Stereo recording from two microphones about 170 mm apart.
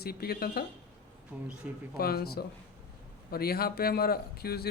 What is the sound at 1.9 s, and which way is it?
Speech, 65° left (ahead or behind).